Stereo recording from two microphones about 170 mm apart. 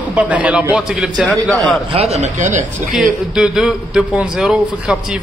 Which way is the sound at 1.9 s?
40° right (ahead or behind).